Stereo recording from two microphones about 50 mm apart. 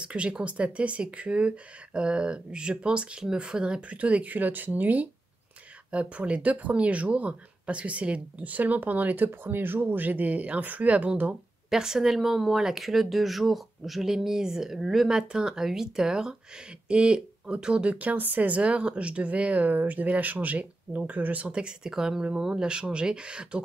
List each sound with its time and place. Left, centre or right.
0.0 s speech: right
11.7 s speech: centre; by 18.6 s right
18.6 s speech: right
21.5 s speech: centre